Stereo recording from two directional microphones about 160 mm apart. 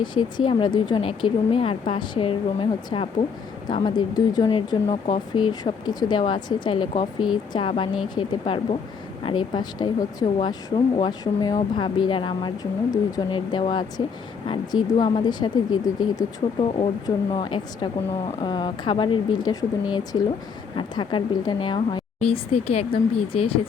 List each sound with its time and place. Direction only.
0.0 s speech: 30° left (ahead or behind)